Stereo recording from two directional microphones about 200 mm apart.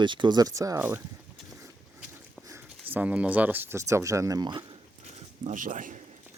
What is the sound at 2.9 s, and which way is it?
Speech, 5° right (ahead or behind).